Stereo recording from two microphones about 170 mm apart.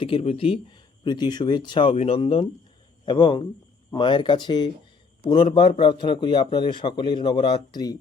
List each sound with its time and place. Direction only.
0.0 s a man's voice: 35° left (ahead or behind)